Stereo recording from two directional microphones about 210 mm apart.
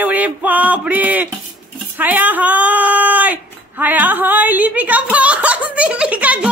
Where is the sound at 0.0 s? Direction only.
5° right (ahead or behind).